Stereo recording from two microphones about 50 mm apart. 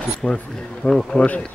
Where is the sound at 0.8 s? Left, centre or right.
Centre.